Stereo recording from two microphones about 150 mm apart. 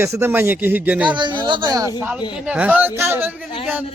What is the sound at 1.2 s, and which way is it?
Speech, 30° right (ahead or behind).